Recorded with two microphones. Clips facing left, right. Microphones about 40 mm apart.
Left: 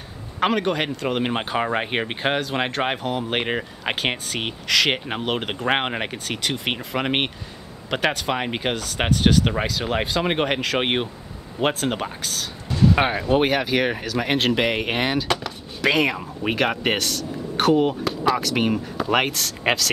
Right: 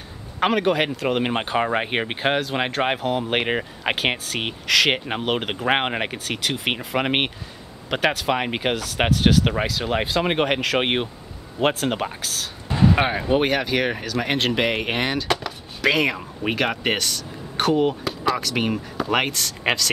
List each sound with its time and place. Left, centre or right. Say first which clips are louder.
0.4 s speech: right 2 dB; centre
12.6 s artillery fire: right 1 dB; right
12.9 s speech: left 1 dB; centre